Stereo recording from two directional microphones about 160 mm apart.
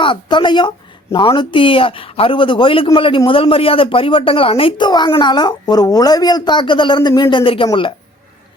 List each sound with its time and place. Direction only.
0.0 s a man's voice: 30° left (ahead or behind)